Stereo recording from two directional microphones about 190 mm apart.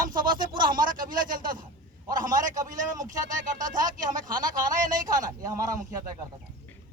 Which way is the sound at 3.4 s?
45° right (ahead or behind).